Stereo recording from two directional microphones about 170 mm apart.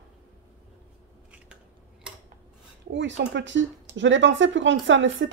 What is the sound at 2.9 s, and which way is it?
Speech, 90° right.